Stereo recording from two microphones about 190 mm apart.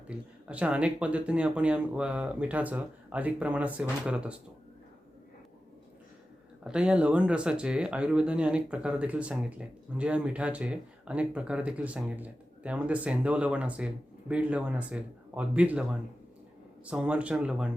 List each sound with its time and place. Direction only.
0.1 s speech: 5° right (ahead or behind)
6.7 s speech: 5° right (ahead or behind)